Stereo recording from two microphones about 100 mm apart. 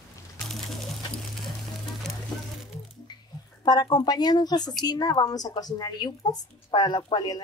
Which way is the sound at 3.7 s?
45° left (ahead or behind).